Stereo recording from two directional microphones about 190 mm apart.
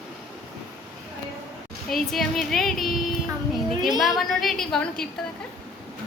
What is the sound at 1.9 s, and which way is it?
Music, centre (ahead or behind).